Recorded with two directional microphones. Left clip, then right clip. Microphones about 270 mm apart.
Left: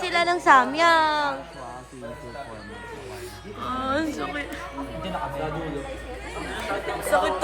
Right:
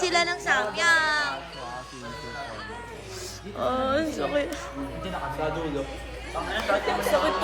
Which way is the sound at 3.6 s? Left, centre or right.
Centre.